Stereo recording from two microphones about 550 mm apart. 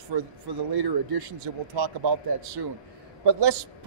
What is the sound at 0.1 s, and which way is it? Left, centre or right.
A man's voice, right.